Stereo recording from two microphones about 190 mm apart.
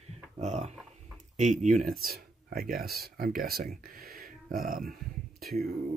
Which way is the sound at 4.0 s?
50° right (ahead or behind).